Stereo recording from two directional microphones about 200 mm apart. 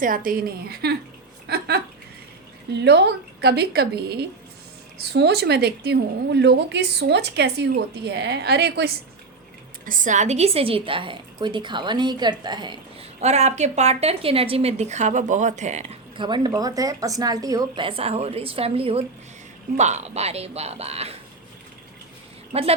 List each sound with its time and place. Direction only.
0.0 s a woman's voice: 45° right (ahead or behind)
2.8 s a woman's voice: 55° right (ahead or behind)
9.8 s a woman's voice: 40° right (ahead or behind)
22.5 s a woman's voice: 30° right (ahead or behind)